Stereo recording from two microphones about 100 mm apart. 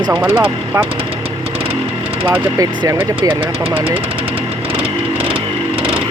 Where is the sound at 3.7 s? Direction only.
70° right (ahead or behind).